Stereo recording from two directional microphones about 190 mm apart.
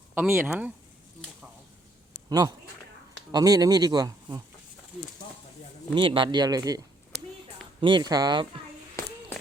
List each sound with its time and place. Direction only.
0.1 s speech: 10° right (ahead or behind)
3.3 s speech: 20° right (ahead or behind)
5.9 s speech: 25° right (ahead or behind)